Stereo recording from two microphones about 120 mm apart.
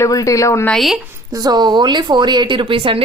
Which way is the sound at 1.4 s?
35° right (ahead or behind).